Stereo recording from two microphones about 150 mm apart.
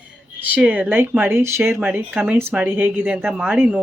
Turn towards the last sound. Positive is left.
turn(degrees=-10)  # may be behind; listen again after turning